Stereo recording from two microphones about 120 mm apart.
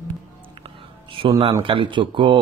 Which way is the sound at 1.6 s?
45° right (ahead or behind).